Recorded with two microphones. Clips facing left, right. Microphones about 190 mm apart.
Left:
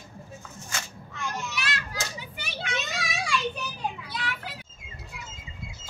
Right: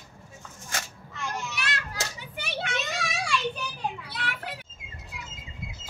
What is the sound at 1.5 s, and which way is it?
Children playing, 55° right (ahead or behind).